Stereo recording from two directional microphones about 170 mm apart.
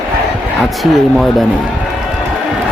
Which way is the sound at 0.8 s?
Centre (ahead or behind).